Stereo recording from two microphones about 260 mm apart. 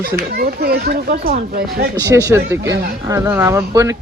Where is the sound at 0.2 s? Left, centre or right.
Right.